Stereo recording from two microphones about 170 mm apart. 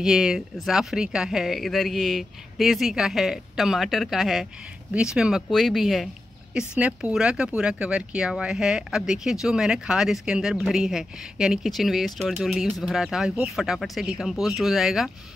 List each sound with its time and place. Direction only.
0.0 s speech: 5° right (ahead or behind)